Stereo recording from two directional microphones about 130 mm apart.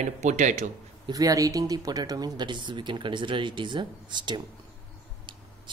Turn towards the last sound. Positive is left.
turn(degrees=-35)  # may be behind; listen again after turning